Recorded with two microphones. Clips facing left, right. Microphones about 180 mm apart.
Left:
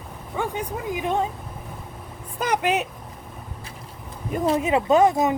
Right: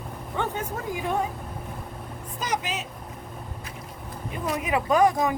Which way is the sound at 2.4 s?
60° left (ahead or behind).